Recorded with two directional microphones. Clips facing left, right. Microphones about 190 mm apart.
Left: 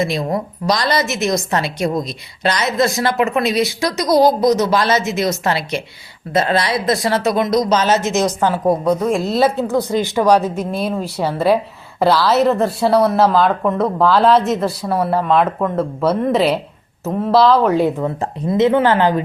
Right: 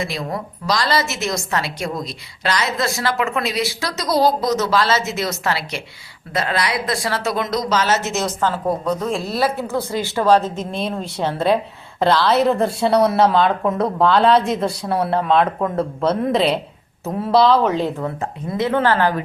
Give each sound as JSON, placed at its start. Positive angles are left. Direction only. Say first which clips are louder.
{"t": 0.0, "sound": "a woman's voice", "louder": "left 6 dB", "side_deg": 20}